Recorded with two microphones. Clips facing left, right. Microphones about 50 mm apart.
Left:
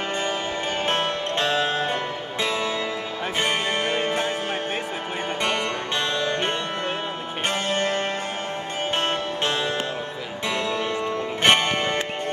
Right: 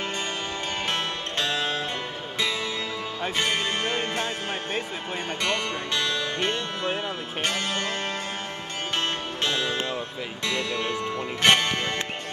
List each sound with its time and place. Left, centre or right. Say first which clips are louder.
0.8 s music: left 5 dB; left
3.3 s music: left 3 dB; left
5.4 s music: left 2 dB; left
11.4 s music: left 2 dB; left